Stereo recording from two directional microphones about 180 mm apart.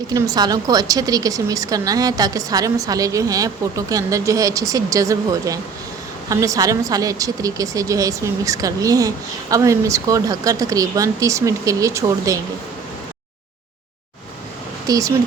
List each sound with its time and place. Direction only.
0.1 s a woman's voice: 20° right (ahead or behind)
14.8 s speech: 20° right (ahead or behind)